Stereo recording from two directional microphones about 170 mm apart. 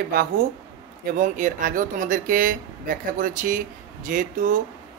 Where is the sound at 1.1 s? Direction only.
50° right (ahead or behind).